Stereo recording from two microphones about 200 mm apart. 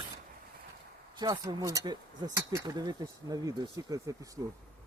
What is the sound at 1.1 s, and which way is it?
Speech, 20° right (ahead or behind).